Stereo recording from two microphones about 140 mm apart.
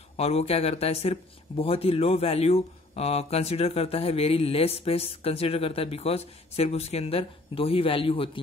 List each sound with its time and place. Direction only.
0.2 s speech: 50° left (ahead or behind)